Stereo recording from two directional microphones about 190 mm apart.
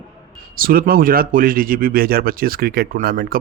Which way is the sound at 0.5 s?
50° right (ahead or behind).